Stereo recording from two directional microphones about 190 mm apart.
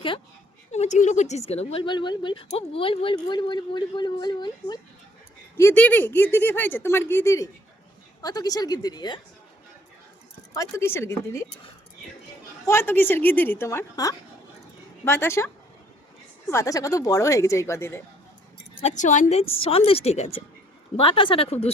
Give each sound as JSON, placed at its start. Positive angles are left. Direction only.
{"t": 0.7, "sound": "speech", "side_deg": 35}
{"t": 5.5, "sound": "speech", "side_deg": 10}
{"t": 10.6, "sound": "speech", "side_deg": 15}
{"t": 12.6, "sound": "speech", "side_deg": 10}
{"t": 16.5, "sound": "speech", "side_deg": 15}
{"t": 18.8, "sound": "a woman's voice", "side_deg": 40}